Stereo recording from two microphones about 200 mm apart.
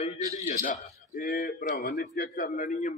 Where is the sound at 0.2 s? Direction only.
15° right (ahead or behind).